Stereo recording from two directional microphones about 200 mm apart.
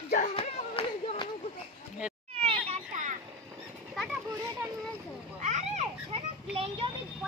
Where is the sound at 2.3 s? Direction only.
30° right (ahead or behind).